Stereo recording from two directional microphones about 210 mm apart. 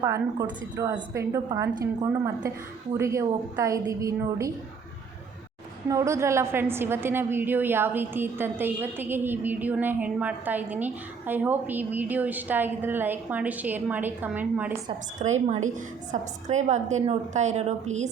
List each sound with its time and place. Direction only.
0.0 s a woman's voice: 15° right (ahead or behind)
5.9 s a woman's voice: 15° right (ahead or behind)
15.2 s a woman's voice: 30° right (ahead or behind)